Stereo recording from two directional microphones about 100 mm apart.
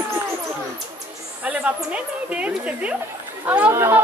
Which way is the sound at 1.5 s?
15° right (ahead or behind).